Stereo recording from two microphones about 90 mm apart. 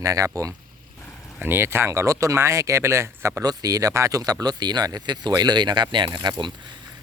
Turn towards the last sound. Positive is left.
turn(degrees=-55)  # may be behind; listen again after turning